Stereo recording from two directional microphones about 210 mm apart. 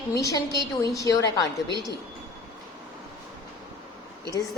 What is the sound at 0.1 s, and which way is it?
A woman's voice, 15° left (ahead or behind).